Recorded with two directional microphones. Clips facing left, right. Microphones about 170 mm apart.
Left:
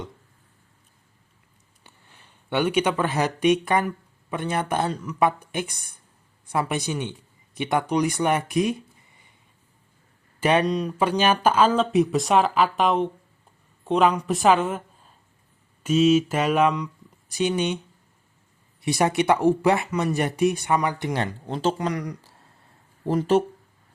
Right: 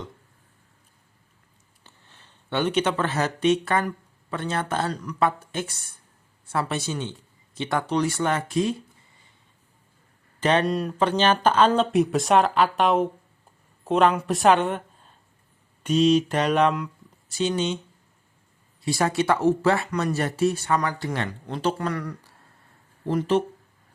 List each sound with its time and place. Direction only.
1.8 s speech: 15° left (ahead or behind)
10.4 s speech: 10° left (ahead or behind)
10.7 s speech: centre (ahead or behind)
11.2 s a woman's voice: 10° left (ahead or behind)
17.2 s speech: 15° left (ahead or behind)
18.8 s speech: 20° left (ahead or behind)
21.1 s speech: 30° left (ahead or behind); by 22.2 s 15° left (ahead or behind)
23.0 s speech: 40° left (ahead or behind)